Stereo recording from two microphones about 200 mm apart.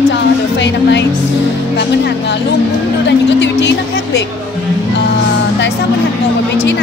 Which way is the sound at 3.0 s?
60° left (ahead or behind).